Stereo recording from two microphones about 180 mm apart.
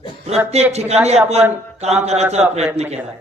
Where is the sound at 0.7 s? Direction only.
35° right (ahead or behind).